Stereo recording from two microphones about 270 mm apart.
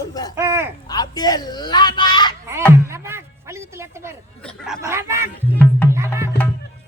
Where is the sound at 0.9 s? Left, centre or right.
Centre.